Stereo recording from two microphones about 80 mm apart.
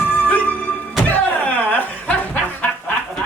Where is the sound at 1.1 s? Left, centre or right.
Left.